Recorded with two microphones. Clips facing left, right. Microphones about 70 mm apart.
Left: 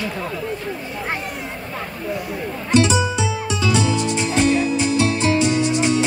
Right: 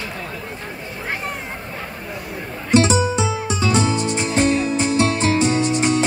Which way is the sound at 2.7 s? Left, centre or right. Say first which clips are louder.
Right 1 dB; right.